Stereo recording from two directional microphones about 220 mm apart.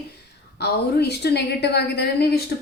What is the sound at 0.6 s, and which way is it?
A woman's voice, 50° left (ahead or behind).